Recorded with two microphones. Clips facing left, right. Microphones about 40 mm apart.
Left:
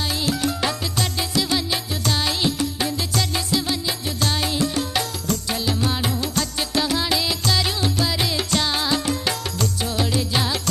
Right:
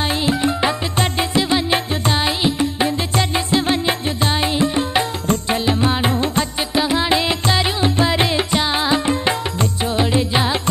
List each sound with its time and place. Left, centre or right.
0.2 s music: right
4.2 s music: right
6.7 s music: right